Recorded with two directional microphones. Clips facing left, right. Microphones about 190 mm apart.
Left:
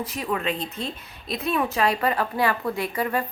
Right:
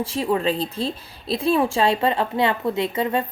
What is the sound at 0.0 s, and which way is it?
Speech, 30° right (ahead or behind).